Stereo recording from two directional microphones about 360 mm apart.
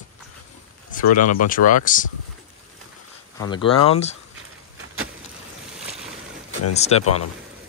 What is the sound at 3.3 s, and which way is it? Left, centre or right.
Speech, centre.